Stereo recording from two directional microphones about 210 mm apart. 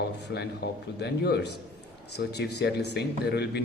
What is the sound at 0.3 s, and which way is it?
A man's voice, 50° left (ahead or behind).